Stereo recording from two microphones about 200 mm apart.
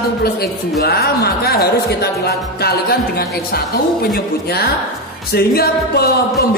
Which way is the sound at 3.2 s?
50° left (ahead or behind).